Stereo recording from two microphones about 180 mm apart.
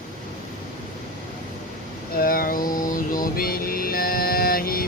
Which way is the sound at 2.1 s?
55° left (ahead or behind).